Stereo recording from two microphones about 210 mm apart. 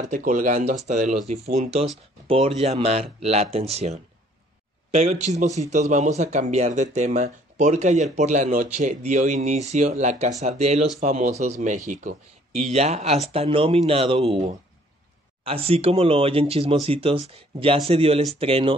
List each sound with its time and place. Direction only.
0.1 s a man's voice: 40° right (ahead or behind)